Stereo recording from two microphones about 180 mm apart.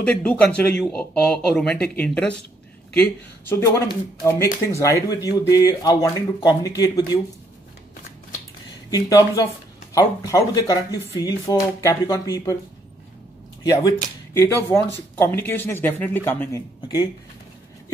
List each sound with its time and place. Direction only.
0.0 s speech: 10° left (ahead or behind)
8.9 s speech: 20° left (ahead or behind)
13.7 s speech: 20° left (ahead or behind)
16.8 s speech: 25° left (ahead or behind)